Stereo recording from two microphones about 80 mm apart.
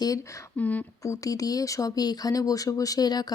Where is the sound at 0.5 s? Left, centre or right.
Centre.